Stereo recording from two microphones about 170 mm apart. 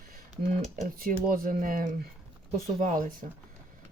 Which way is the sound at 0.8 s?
55° right (ahead or behind).